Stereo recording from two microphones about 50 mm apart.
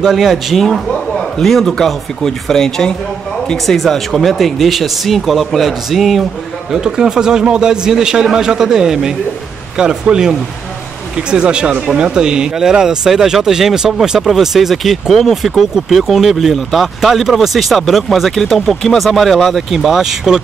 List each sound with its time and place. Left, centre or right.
0.0 s a man's voice: centre
0.6 s speech: centre
6.7 s a man's voice: centre